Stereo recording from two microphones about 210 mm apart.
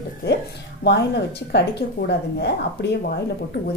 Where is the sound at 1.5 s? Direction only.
55° left (ahead or behind).